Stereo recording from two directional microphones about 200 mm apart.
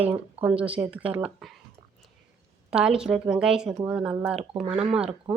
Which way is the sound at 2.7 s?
5° right (ahead or behind).